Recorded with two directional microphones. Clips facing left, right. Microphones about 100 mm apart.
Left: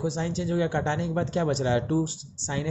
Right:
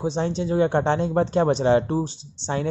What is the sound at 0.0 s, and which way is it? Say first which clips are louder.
Speech: right 4 dB; 30° right (ahead or behind).